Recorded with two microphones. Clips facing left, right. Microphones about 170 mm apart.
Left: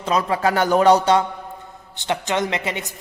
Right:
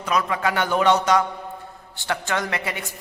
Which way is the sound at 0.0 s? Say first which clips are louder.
Left 3 dB; 30° left (ahead or behind).